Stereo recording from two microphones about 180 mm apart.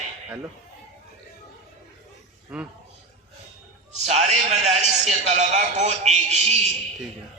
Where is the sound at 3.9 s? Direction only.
40° right (ahead or behind).